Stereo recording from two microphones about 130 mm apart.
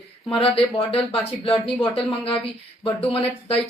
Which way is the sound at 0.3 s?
45° left (ahead or behind).